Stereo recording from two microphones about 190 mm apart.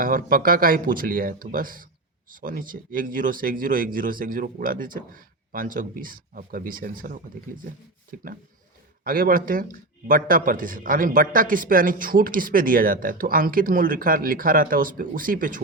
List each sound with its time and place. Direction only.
0.0 s a man's voice: 50° right (ahead or behind)